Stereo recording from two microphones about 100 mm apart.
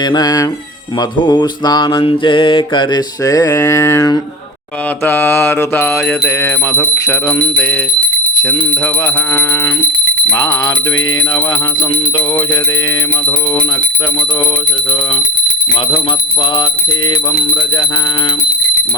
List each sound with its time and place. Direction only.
0.0 s a sound: 45° left (ahead or behind)
1.2 s mantra: 50° left (ahead or behind)
3.2 s a sound: 35° left (ahead or behind)
5.0 s mantra: 20° left (ahead or behind)
9.3 s mantra: 20° left (ahead or behind)
10.2 s jingle bell: 25° left (ahead or behind)